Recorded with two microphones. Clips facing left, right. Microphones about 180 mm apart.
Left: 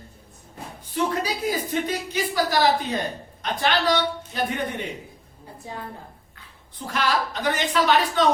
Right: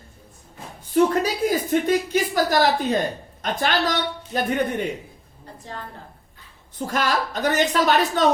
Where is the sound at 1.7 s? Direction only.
50° right (ahead or behind).